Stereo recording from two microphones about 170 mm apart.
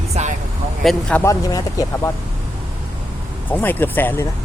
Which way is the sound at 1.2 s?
20° left (ahead or behind).